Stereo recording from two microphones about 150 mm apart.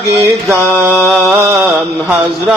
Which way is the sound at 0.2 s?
20° right (ahead or behind).